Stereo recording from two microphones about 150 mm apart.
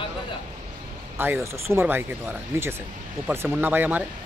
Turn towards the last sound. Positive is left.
turn(degrees=-10)  # may be behind; listen again after turning